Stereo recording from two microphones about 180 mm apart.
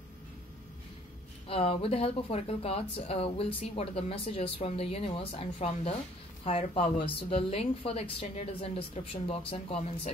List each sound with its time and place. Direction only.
1.5 s speech: 30° left (ahead or behind)